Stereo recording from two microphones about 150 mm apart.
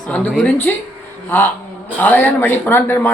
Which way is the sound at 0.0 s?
10° left (ahead or behind).